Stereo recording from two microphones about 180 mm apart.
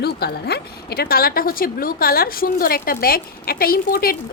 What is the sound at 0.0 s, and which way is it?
A woman's voice, 65° left (ahead or behind).